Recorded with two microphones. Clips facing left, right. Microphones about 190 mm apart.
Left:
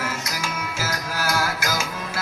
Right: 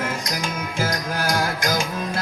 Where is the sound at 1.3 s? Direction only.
30° right (ahead or behind).